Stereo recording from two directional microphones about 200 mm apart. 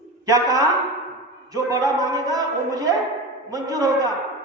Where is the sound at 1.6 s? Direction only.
15° right (ahead or behind).